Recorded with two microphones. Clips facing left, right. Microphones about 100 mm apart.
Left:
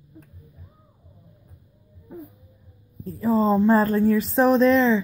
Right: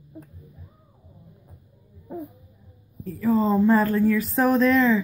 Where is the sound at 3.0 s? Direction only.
25° left (ahead or behind).